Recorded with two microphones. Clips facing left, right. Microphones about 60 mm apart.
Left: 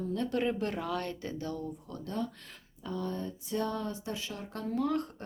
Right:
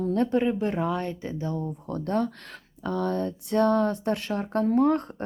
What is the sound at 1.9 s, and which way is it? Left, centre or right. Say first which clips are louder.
Speech: right 11 dB; right.